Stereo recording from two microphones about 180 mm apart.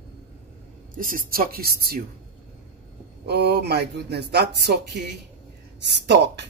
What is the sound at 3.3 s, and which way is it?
A woman's voice, 65° right (ahead or behind).